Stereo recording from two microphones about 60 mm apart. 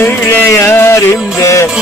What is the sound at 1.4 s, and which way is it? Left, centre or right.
Music, left.